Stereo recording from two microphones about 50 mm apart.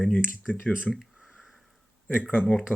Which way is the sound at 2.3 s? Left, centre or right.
Left.